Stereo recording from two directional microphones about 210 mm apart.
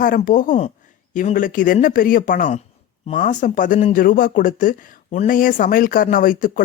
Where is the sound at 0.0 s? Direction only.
40° left (ahead or behind).